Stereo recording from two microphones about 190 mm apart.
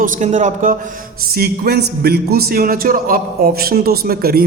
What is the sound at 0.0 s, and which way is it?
A man's voice, 40° right (ahead or behind).